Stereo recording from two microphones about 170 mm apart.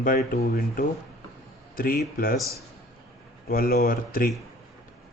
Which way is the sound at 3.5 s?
65° left (ahead or behind).